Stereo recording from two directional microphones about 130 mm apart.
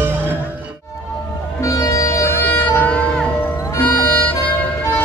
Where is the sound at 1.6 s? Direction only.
25° left (ahead or behind).